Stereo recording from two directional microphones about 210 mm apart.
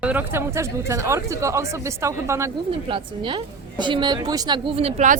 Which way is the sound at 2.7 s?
25° right (ahead or behind).